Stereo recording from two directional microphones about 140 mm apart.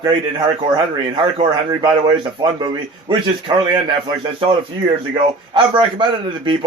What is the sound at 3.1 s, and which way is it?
A man's voice, 30° right (ahead or behind).